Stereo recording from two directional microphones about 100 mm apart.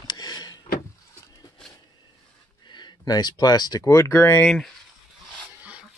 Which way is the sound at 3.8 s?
30° left (ahead or behind).